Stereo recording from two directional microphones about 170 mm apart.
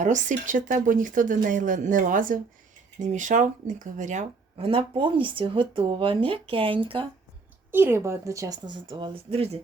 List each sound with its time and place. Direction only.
0.0 s speech: 45° right (ahead or behind)
7.7 s speech: 15° right (ahead or behind); by 9.6 s 35° right (ahead or behind)